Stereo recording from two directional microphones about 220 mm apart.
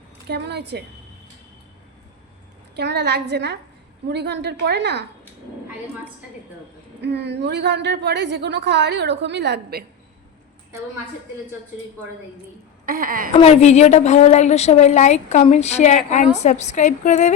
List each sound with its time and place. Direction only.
0.3 s a woman's voice: 50° right (ahead or behind)
2.7 s a woman's voice: 50° right (ahead or behind)
7.0 s a woman's voice: 50° right (ahead or behind)
12.8 s a woman's voice: 40° right (ahead or behind)
13.3 s a woman's voice: 30° left (ahead or behind)